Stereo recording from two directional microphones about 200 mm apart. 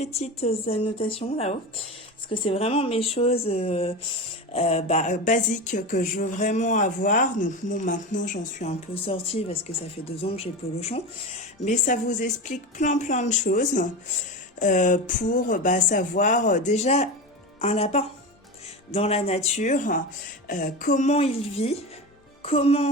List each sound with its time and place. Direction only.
0.0 s speech: 30° left (ahead or behind)